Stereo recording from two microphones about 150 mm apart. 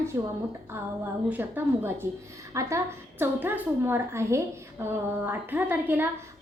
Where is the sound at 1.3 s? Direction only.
15° right (ahead or behind).